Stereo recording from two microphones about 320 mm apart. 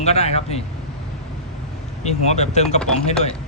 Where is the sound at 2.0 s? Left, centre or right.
Left.